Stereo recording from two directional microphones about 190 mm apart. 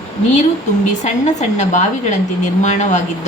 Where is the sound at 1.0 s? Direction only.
40° left (ahead or behind).